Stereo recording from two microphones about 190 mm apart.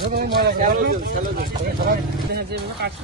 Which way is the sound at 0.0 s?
55° right (ahead or behind).